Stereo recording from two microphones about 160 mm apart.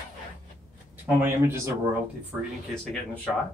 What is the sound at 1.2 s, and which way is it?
Speech, 15° right (ahead or behind).